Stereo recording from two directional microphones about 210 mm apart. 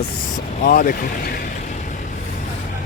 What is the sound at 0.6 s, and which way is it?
Speech, 40° left (ahead or behind).